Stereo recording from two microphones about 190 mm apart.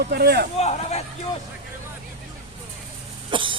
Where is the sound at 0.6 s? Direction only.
35° left (ahead or behind).